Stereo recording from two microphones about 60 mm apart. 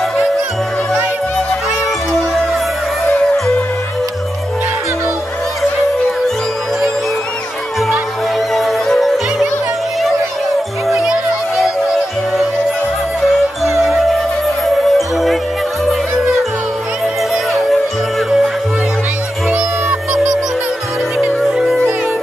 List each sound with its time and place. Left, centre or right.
8.5 s music: centre
10.9 s music: centre
13.8 s music: centre
19.5 s music: right
21.5 s music: centre